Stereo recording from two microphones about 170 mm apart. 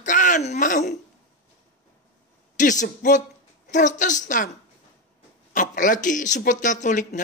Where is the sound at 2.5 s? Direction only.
50° left (ahead or behind).